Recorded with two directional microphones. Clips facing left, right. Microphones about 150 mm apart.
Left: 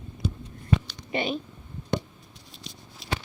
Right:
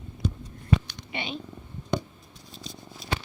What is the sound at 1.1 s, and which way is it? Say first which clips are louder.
Speech: left 7 dB; 45° left (ahead or behind).